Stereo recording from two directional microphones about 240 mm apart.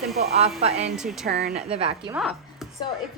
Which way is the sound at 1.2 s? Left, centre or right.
Right.